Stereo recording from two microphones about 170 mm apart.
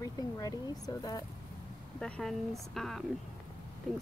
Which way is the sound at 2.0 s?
5° left (ahead or behind).